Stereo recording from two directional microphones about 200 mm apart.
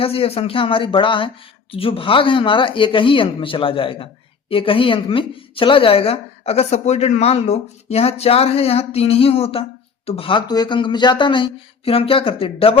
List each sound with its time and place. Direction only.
0.0 s speech: 30° left (ahead or behind)